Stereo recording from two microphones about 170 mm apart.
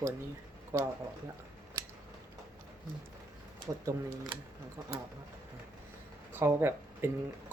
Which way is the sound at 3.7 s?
20° right (ahead or behind).